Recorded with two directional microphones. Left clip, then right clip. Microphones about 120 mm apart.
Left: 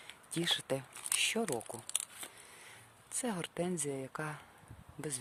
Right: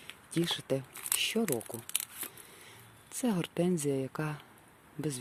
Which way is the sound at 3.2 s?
20° right (ahead or behind).